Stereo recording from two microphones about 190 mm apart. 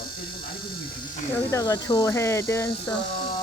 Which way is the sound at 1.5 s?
20° left (ahead or behind).